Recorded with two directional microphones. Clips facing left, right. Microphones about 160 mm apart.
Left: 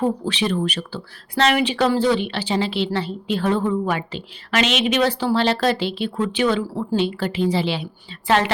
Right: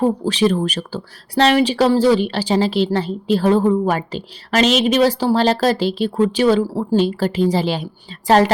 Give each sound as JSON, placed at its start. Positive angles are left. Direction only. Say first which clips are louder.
{"t": 0.0, "sound": "speech", "louder": "right 5 dB", "side_deg": -40}